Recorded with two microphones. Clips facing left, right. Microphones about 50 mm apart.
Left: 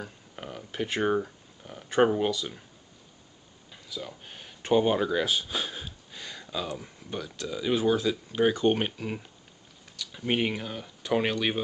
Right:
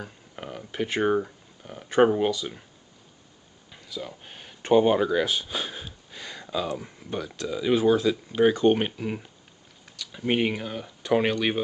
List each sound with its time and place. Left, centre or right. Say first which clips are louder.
0.0 s speech: right 2 dB; centre
3.7 s a sound: right 2 dB; centre
6.5 s speech: right 5 dB; centre